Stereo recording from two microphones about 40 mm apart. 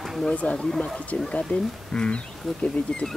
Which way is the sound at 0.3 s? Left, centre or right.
Left.